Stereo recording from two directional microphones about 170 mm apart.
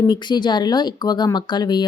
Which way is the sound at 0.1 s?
25° left (ahead or behind).